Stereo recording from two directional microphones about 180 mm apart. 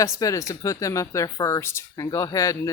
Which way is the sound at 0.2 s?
15° left (ahead or behind).